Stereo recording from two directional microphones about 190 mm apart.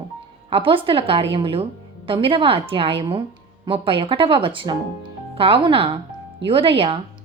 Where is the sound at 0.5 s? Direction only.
30° right (ahead or behind).